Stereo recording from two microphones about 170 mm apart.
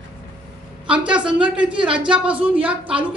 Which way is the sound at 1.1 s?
5° right (ahead or behind).